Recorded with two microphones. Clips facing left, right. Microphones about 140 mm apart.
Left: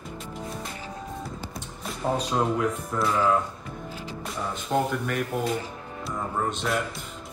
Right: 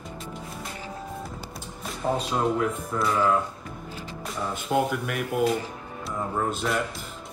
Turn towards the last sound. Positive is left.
turn(degrees=0)  # may be behind; listen again after turning